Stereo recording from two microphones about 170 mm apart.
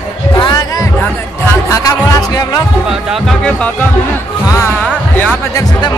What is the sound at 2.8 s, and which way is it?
Speech, centre (ahead or behind).